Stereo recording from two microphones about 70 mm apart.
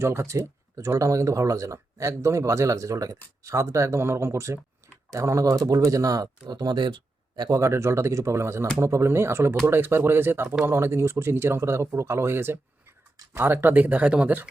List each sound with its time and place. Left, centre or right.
0.0 s speech: right
7.5 s speech: right; by 14.5 s centre